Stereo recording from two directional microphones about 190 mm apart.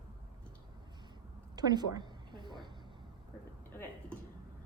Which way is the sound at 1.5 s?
20° right (ahead or behind).